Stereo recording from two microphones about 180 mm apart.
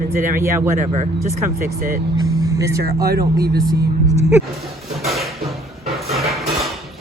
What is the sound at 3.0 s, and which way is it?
Speech, 60° right (ahead or behind).